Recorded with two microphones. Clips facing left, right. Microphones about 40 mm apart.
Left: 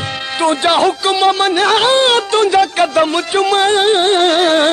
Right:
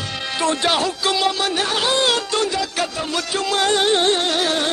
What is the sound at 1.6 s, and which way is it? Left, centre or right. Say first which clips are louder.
Music: left 10 dB; left.